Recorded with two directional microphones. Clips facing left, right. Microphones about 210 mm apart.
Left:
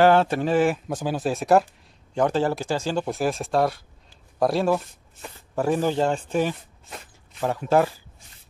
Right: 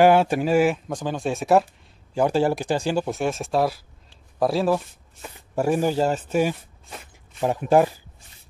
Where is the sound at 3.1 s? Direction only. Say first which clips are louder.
Even; centre (ahead or behind).